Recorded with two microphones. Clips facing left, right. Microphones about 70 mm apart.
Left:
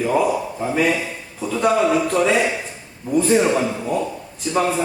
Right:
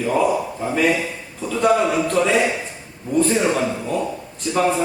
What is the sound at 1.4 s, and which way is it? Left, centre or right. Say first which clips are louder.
A man's voice: even; centre.